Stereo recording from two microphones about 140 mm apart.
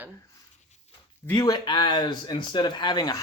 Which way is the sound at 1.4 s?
30° left (ahead or behind).